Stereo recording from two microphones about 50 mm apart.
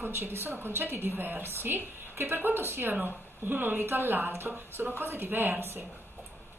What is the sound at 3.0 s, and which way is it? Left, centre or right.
A woman's voice, right.